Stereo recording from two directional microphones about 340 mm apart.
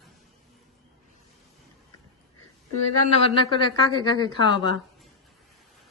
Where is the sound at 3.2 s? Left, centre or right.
Centre.